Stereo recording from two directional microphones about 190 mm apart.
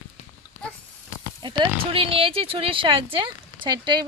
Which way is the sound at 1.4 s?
25° right (ahead or behind).